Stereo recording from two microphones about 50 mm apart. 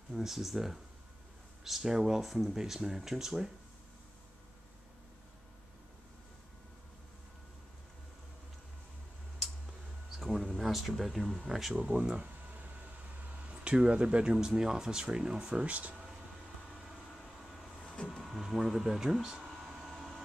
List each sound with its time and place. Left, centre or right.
0.1 s speech: centre
10.1 s a sound: centre
11.1 s speech: centre
11.9 s speech: right
12.3 s a sound: right
13.5 s speech: right
17.2 s vehicle: centre
17.7 s vehicle: left
18.2 s speech: centre
19.6 s a sound: centre